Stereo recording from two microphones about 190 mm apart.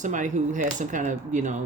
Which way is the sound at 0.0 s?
40° right (ahead or behind).